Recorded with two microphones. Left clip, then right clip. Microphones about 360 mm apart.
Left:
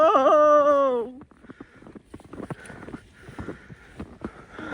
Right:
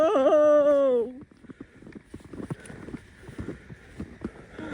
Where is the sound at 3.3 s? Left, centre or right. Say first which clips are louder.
Left 2 dB; centre.